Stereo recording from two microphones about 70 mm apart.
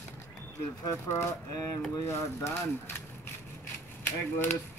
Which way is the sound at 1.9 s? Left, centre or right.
Left.